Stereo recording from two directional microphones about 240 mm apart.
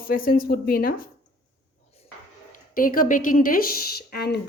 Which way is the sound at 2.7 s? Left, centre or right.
Left.